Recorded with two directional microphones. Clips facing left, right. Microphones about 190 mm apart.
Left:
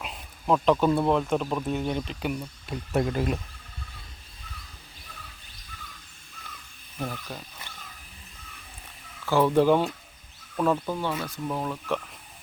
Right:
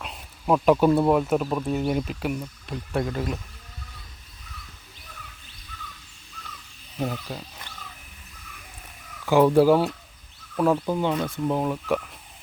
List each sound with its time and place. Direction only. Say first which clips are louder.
0.0 s speech: right 2 dB; 5° right (ahead or behind)
2.9 s speech: left 1 dB; 25° left (ahead or behind)
7.3 s speech: right 4 dB; 10° right (ahead or behind)
9.2 s speech: right 4 dB; 15° right (ahead or behind)